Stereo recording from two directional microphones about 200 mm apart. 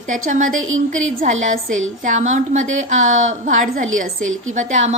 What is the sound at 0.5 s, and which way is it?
Speech, 85° right.